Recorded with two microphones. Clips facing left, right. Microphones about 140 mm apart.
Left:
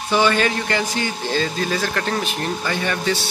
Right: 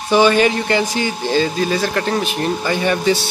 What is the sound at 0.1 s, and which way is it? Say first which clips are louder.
Speech: right 5 dB; 15° right (ahead or behind).